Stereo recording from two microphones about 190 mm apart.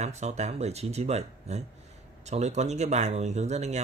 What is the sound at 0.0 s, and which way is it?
Speech, 35° right (ahead or behind).